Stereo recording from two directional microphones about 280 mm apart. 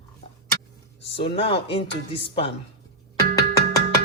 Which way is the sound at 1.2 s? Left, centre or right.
Centre.